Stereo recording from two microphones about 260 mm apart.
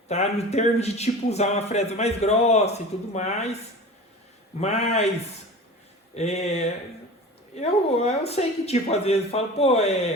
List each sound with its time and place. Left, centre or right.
0.1 s speech: left
4.6 s speech: left
6.1 s speech: left